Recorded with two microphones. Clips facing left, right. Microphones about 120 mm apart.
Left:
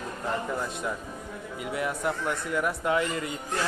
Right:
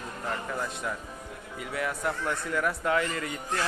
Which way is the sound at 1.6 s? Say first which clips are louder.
Left 1 dB; 20° left (ahead or behind).